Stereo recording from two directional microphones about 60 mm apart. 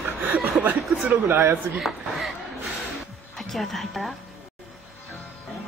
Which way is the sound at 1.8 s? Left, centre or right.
Centre.